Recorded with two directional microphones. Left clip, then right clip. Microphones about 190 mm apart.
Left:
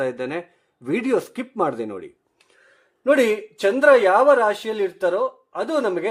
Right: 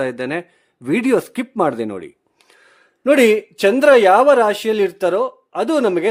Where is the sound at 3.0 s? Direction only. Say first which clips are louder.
Right 5 dB; 60° right (ahead or behind).